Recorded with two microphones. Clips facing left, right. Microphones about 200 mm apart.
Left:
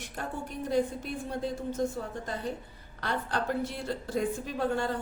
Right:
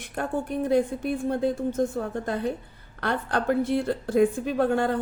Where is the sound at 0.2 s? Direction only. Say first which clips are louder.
Right 9 dB; 55° right (ahead or behind).